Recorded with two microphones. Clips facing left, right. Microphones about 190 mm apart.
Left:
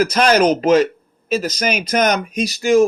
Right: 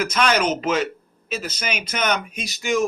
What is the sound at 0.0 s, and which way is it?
Speech, 40° left (ahead or behind).